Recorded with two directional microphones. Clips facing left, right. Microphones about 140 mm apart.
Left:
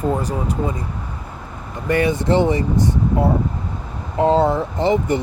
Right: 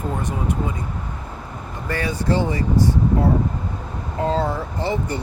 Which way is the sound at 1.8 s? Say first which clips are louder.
Left 5 dB; 20° left (ahead or behind).